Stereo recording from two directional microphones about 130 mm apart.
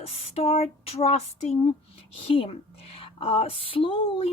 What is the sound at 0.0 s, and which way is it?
A woman's voice, 50° left (ahead or behind).